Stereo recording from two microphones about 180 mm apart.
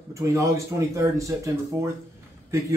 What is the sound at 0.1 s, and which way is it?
Speech, 15° right (ahead or behind).